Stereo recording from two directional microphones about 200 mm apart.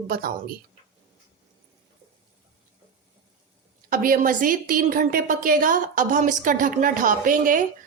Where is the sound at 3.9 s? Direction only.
45° right (ahead or behind).